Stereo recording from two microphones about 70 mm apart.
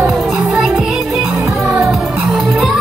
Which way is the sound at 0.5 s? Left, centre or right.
Centre.